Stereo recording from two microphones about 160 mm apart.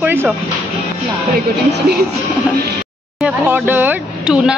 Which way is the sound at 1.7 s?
90° right.